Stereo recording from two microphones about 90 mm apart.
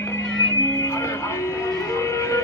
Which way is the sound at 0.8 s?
30° left (ahead or behind).